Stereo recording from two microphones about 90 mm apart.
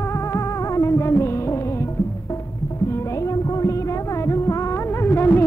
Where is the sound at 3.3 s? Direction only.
40° left (ahead or behind).